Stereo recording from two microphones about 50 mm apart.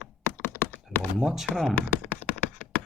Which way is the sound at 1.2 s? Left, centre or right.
Centre.